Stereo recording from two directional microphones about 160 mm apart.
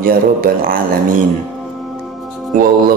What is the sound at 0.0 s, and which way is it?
Speech, 65° right (ahead or behind).